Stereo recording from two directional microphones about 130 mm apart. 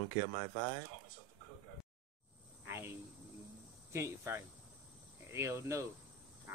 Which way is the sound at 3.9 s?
20° right (ahead or behind).